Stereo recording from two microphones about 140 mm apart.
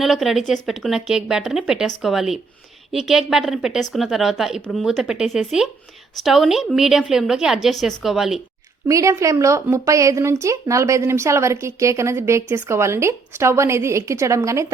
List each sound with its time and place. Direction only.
0.0 s a woman's voice: centre (ahead or behind)
8.9 s a woman's voice: 25° right (ahead or behind)